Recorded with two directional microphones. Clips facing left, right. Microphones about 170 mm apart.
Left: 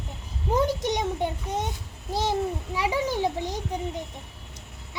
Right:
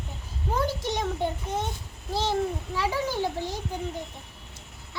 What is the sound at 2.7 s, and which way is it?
Speech, 15° left (ahead or behind).